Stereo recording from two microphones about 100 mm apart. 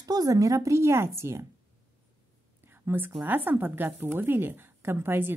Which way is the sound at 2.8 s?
20° right (ahead or behind).